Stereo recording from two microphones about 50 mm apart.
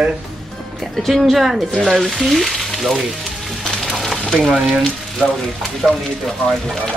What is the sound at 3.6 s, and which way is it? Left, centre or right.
Music, centre.